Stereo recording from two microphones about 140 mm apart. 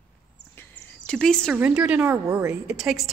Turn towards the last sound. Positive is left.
turn(degrees=-5)  # may be behind; listen again after turning